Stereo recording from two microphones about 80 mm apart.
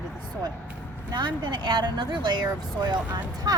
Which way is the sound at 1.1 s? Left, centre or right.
Right.